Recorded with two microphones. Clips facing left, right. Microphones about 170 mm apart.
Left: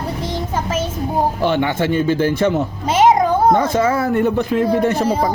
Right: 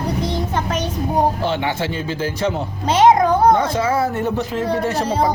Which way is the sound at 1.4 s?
55° left (ahead or behind).